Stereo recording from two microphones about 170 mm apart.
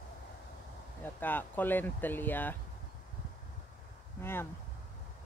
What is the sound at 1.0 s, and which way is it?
Speech, 10° left (ahead or behind).